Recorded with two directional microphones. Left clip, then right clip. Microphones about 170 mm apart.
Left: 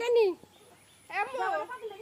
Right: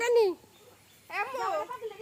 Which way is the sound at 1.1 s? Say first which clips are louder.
Left 1 dB; 45° right (ahead or behind).